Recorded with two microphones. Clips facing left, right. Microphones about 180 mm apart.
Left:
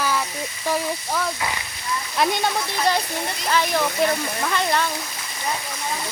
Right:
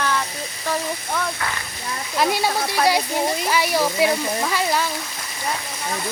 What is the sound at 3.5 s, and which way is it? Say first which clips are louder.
Speech: left 4 dB; 10° right (ahead or behind).